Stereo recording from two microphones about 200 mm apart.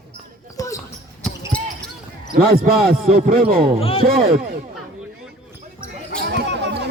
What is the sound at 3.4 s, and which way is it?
Speech, 40° right (ahead or behind).